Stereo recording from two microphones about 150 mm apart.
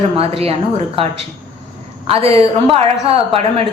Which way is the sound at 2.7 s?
40° right (ahead or behind).